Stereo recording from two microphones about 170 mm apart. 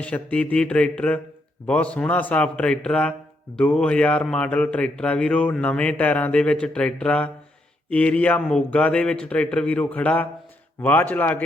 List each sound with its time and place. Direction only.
0.0 s speech: 10° left (ahead or behind)